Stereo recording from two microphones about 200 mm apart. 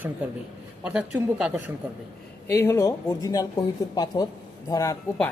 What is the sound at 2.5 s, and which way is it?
Speech, 10° left (ahead or behind).